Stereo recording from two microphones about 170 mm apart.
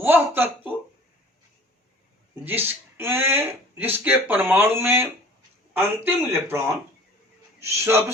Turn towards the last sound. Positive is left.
turn(degrees=-15)  # may be behind; listen again after turning